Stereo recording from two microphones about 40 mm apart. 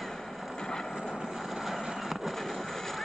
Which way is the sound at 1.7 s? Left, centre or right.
Centre.